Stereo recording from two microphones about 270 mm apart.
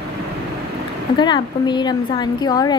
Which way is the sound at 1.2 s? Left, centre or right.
Centre.